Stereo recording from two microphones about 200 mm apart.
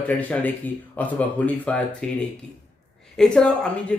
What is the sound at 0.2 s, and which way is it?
Speech, 10° left (ahead or behind).